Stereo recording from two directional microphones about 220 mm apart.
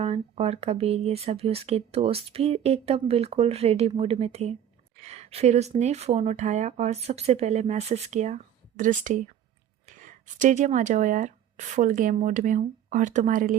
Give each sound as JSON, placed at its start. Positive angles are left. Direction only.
{"t": 0.0, "sound": "speech", "side_deg": -25}